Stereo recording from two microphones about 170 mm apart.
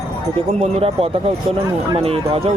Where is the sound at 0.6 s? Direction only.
35° right (ahead or behind).